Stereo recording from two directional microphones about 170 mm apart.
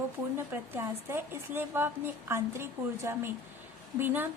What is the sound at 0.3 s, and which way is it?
Speech, 15° right (ahead or behind).